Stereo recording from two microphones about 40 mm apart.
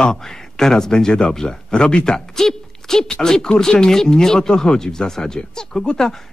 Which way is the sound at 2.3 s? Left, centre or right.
Centre.